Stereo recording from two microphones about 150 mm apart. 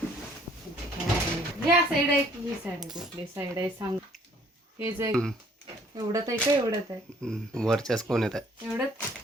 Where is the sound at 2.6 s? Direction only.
5° right (ahead or behind).